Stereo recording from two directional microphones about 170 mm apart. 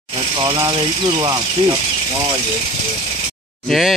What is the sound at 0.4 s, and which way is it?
Speech, 25° right (ahead or behind).